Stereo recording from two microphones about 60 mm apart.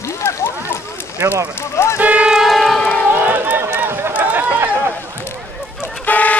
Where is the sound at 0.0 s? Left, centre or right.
Left.